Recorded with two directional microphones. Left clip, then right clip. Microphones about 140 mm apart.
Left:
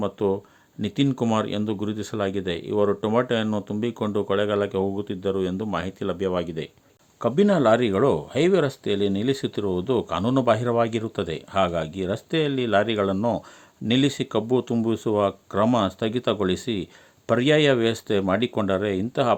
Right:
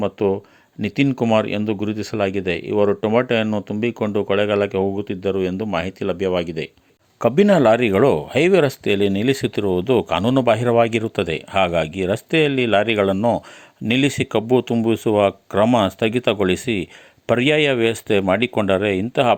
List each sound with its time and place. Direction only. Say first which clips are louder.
0.0 s speech: right 4 dB; 15° right (ahead or behind)